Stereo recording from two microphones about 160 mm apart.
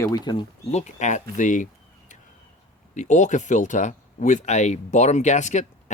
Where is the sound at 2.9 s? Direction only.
50° left (ahead or behind).